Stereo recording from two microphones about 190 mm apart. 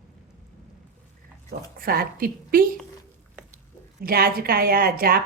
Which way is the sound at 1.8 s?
50° right (ahead or behind).